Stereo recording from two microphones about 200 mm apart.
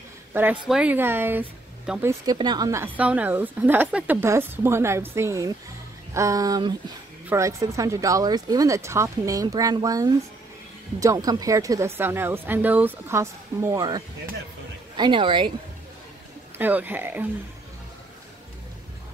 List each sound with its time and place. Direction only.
0.3 s speech: 10° right (ahead or behind); by 15.5 s 25° right (ahead or behind)
16.5 s speech: 10° right (ahead or behind)